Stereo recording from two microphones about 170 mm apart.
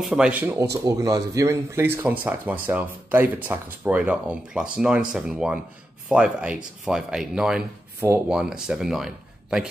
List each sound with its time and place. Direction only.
0.0 s speech: 5° right (ahead or behind)